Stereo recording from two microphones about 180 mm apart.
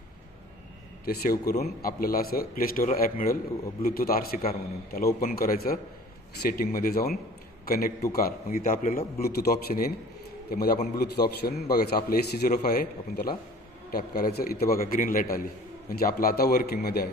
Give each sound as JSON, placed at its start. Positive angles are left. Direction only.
{"t": 1.0, "sound": "a man's voice", "side_deg": 60}